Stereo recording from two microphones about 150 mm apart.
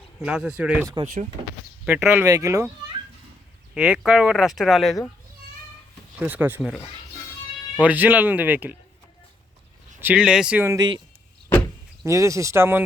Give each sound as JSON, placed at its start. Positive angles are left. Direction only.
{"t": 0.2, "sound": "speech", "side_deg": -5}
{"t": 1.0, "sound": "speech", "side_deg": -60}
{"t": 1.8, "sound": "speech", "side_deg": -15}
{"t": 3.8, "sound": "speech", "side_deg": -5}
{"t": 6.1, "sound": "speech", "side_deg": -10}
{"t": 7.8, "sound": "speech", "side_deg": -10}
{"t": 10.0, "sound": "speech", "side_deg": -10}
{"t": 10.8, "sound": "speech", "side_deg": -30}
{"t": 11.4, "sound": "vehicle", "side_deg": 15}
{"t": 12.0, "sound": "speech", "side_deg": -20}